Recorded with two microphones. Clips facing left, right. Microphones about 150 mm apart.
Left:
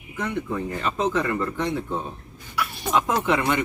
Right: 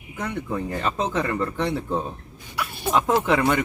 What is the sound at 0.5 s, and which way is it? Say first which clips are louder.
Speech: right 1 dB; 35° right (ahead or behind).